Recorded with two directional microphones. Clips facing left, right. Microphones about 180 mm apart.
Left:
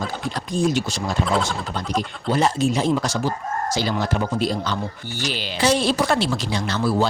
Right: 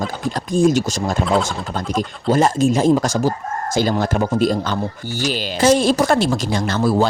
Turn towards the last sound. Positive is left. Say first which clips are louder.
# right 4 dB
turn(degrees=-45)  # may be behind; listen again after turning